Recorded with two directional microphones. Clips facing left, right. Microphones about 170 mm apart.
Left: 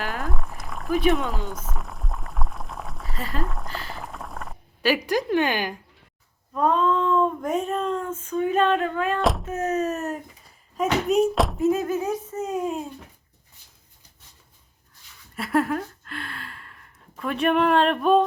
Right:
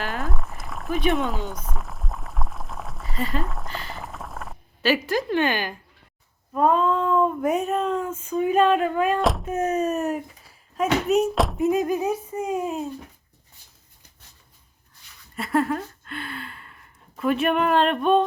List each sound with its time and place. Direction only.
0.0 s a sound: centre (ahead or behind)
4.8 s a woman's voice: 15° left (ahead or behind)
6.5 s speech: 5° right (ahead or behind)
10.4 s a sound: centre (ahead or behind)
11.5 s speech: 15° right (ahead or behind)
15.4 s speech: centre (ahead or behind)